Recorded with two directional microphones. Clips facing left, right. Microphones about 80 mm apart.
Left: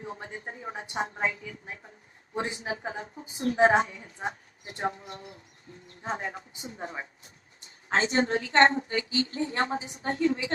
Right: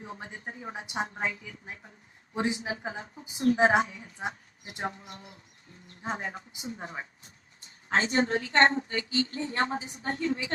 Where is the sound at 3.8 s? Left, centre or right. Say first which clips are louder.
Left 1 dB; left.